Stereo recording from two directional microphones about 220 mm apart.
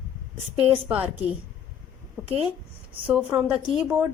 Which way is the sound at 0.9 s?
5° right (ahead or behind).